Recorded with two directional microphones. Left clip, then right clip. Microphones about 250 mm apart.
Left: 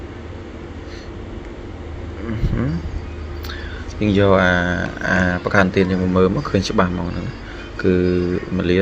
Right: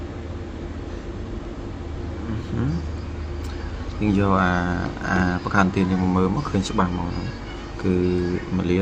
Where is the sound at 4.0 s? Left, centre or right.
Centre.